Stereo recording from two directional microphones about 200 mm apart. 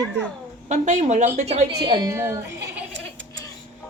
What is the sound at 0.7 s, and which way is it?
Speech, 35° right (ahead or behind).